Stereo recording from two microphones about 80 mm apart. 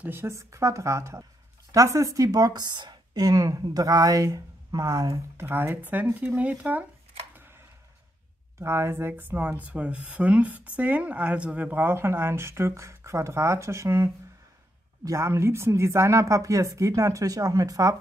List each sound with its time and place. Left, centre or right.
0.0 s a woman's voice: right
5.4 s speech: right
8.5 s a woman's voice: right